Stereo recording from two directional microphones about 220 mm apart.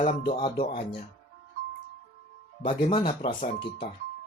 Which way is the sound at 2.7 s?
35° left (ahead or behind).